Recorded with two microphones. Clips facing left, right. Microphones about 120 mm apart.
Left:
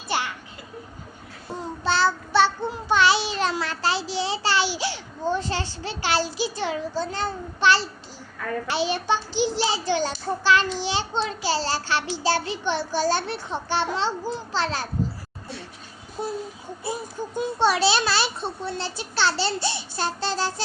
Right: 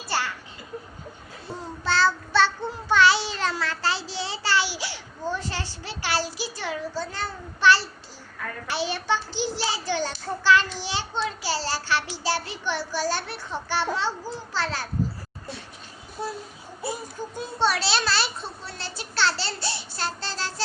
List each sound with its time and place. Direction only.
0.1 s a sound: 20° left (ahead or behind)
1.5 s child singing: 15° left (ahead or behind)
8.7 s a child's voice: 15° left (ahead or behind)
17.6 s a child's voice: 15° left (ahead or behind)